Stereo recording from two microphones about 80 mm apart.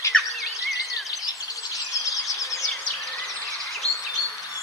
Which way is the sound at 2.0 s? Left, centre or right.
Left.